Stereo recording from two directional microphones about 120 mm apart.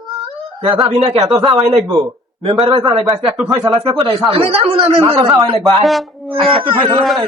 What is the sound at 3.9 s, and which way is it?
Speech, 40° right (ahead or behind).